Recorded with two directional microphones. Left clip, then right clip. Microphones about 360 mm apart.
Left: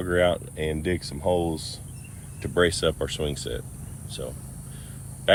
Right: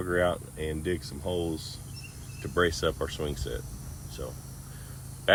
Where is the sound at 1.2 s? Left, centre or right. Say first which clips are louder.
Left 9 dB; centre.